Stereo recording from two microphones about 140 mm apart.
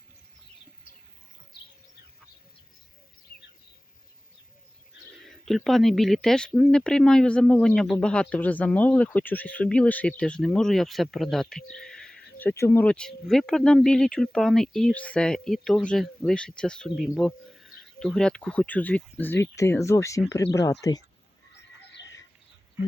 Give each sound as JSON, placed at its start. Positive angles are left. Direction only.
{"t": 5.5, "sound": "speech", "side_deg": 0}